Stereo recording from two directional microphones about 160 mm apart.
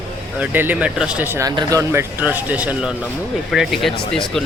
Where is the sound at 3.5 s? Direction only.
Centre (ahead or behind).